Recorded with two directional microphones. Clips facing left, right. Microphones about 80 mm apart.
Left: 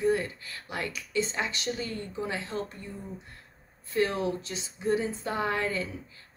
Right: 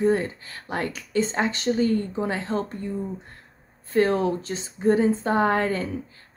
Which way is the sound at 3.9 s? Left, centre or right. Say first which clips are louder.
Right 7 dB; right.